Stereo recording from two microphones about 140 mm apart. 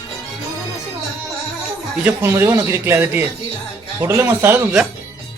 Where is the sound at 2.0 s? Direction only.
15° right (ahead or behind).